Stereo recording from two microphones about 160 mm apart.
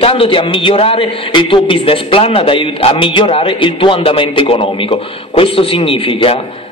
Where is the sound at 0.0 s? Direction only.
35° left (ahead or behind).